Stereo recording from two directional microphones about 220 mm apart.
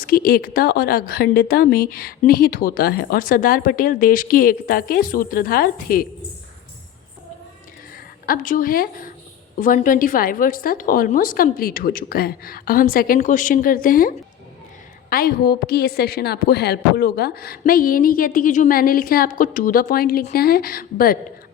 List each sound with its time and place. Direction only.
0.0 s a woman's voice: 45° left (ahead or behind)
7.9 s a woman's voice: 40° left (ahead or behind)
15.1 s a woman's voice: 45° left (ahead or behind)